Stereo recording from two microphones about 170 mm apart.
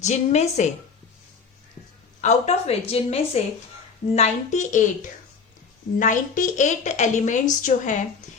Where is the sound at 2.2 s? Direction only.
40° left (ahead or behind).